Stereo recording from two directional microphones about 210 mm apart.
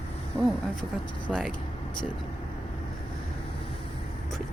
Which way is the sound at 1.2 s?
Centre (ahead or behind).